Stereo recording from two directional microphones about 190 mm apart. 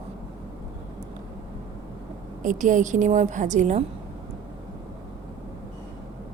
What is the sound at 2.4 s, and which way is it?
A woman's voice, 40° right (ahead or behind).